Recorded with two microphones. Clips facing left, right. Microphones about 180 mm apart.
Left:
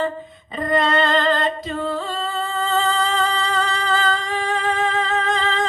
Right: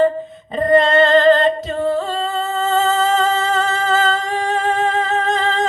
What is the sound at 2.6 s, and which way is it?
Music, 45° right (ahead or behind).